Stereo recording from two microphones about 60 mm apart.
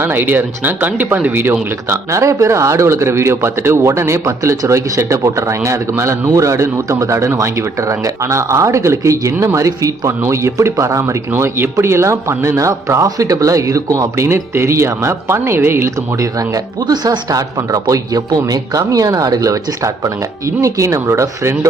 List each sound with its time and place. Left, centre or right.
0.0 s speech: right
1.9 s speech: right
4.6 s speech: right
17.1 s speech: right
20.6 s speech: right